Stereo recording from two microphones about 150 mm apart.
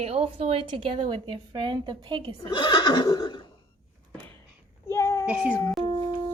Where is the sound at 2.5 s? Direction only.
35° left (ahead or behind).